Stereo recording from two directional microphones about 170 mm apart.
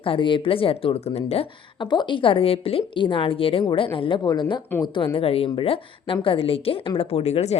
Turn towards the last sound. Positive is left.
turn(degrees=40)  # may be behind; listen again after turning